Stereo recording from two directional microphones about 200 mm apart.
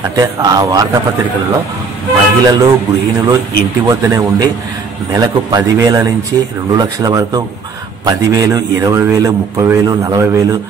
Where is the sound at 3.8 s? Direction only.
15° right (ahead or behind).